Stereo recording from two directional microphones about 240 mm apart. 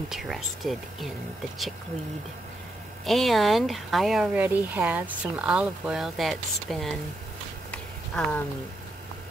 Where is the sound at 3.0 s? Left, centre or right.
Centre.